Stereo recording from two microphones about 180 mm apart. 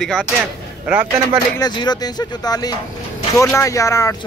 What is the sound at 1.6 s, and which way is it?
Speech, 25° left (ahead or behind).